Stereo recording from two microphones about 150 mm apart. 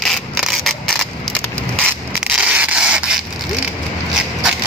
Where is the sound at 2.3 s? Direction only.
10° right (ahead or behind).